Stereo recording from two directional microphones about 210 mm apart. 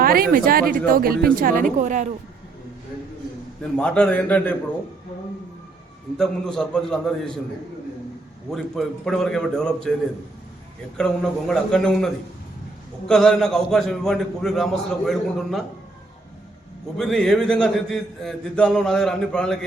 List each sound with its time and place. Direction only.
0.0 s speech: 45° right (ahead or behind)
3.8 s a man's voice: 5° left (ahead or behind)
6.1 s a man's voice: 5° left (ahead or behind)
8.4 s a man's voice: centre (ahead or behind)
10.9 s a man's voice: 5° left (ahead or behind)
17.0 s a man's voice: centre (ahead or behind)